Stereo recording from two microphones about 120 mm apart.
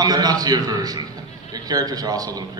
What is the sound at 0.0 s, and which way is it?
A man's voice, 35° right (ahead or behind).